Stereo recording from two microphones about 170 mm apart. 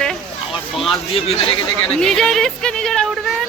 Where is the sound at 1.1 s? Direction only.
35° left (ahead or behind).